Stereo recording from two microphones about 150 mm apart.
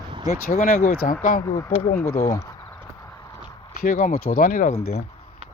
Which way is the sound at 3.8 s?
60° left (ahead or behind).